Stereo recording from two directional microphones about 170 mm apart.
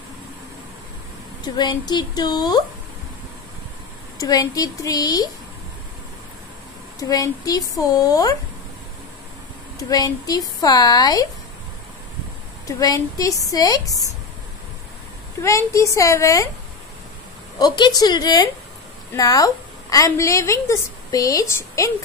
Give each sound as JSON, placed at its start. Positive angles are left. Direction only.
{"t": 1.4, "sound": "a woman's voice", "side_deg": 25}
{"t": 4.2, "sound": "a woman's voice", "side_deg": 20}
{"t": 7.0, "sound": "a woman's voice", "side_deg": 20}
{"t": 9.8, "sound": "a woman's voice", "side_deg": 20}
{"t": 12.6, "sound": "a woman's voice", "side_deg": 20}
{"t": 15.4, "sound": "a woman's voice", "side_deg": 20}
{"t": 17.6, "sound": "a woman's voice", "side_deg": 25}